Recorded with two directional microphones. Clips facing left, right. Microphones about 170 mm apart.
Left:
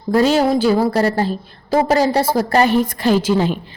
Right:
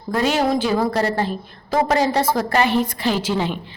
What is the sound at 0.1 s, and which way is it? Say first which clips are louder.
A woman's voice: left 5 dB; 35° left (ahead or behind).